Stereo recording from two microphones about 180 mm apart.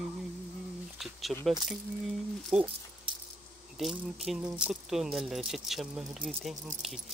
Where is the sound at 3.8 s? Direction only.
Centre (ahead or behind).